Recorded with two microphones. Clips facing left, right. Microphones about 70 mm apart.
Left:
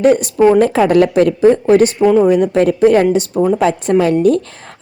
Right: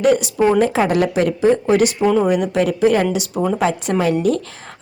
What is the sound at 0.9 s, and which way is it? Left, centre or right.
A woman's voice, left.